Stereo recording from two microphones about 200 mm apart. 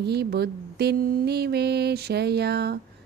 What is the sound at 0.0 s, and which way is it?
Mantra, 55° right (ahead or behind).